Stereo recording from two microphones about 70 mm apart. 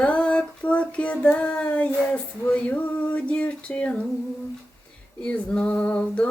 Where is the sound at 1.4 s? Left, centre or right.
Centre.